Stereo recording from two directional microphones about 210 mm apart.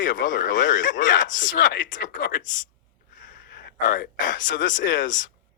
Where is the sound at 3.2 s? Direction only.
55° left (ahead or behind).